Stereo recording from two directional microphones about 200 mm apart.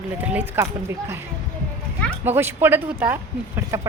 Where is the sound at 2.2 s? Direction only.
10° right (ahead or behind).